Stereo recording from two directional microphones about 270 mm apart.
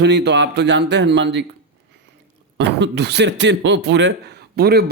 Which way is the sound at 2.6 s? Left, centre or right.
Right.